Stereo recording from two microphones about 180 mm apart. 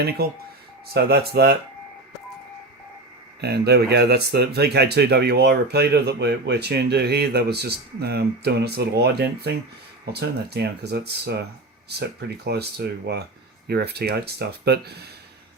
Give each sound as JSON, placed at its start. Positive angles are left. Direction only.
{"t": 0.0, "sound": "speech", "side_deg": -60}
{"t": 3.4, "sound": "speech", "side_deg": -65}
{"t": 12.5, "sound": "speech", "side_deg": -65}